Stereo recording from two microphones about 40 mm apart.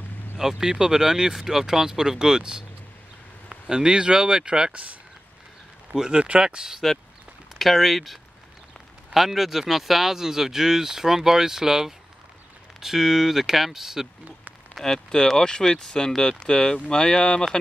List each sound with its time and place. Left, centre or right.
0.4 s speech: centre
5.9 s speech: right
7.5 s speech: centre
15.3 s speech: centre